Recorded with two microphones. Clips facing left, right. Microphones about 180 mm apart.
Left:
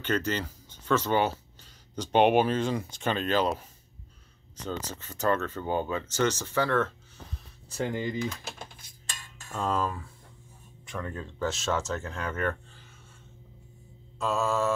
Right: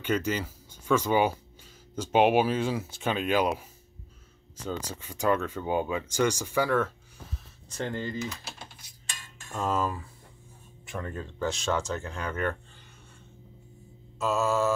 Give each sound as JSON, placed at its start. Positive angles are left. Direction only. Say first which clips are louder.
{"t": 0.0, "sound": "speech", "louder": "right 1 dB", "side_deg": -10}
{"t": 7.7, "sound": "speech", "louder": "left 2 dB", "side_deg": 10}
{"t": 8.2, "sound": "typing", "louder": "left 3 dB", "side_deg": 50}
{"t": 9.5, "sound": "speech", "louder": "right 1 dB", "side_deg": -5}
{"t": 14.1, "sound": "speech", "louder": "right 1 dB", "side_deg": 0}